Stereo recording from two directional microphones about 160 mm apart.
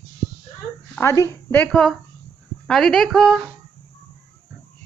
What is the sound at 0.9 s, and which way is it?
A woman's voice, 20° left (ahead or behind).